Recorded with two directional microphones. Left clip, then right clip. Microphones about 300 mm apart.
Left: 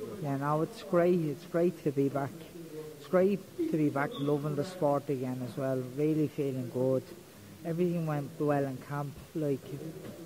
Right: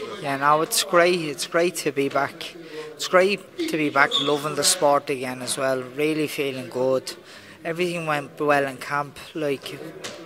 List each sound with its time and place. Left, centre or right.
0.2 s speech: centre
6.7 s speech: centre
7.6 s speech: centre